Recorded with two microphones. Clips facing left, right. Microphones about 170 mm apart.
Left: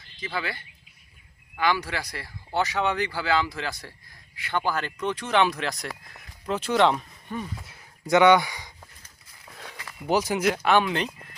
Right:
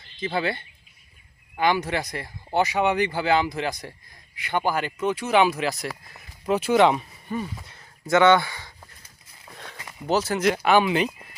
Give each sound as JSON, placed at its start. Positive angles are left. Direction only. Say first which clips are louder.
{"t": 0.2, "sound": "speech", "louder": "right 6 dB", "side_deg": -25}
{"t": 8.0, "sound": "speech", "louder": "even", "side_deg": 15}
{"t": 10.1, "sound": "speech", "louder": "right 1 dB", "side_deg": 10}
{"t": 10.5, "sound": "speech", "louder": "right 3 dB", "side_deg": -5}